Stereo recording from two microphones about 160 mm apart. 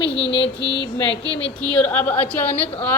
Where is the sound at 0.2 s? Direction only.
90° left.